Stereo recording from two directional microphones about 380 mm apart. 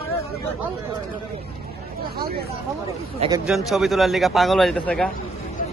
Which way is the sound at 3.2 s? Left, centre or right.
Centre.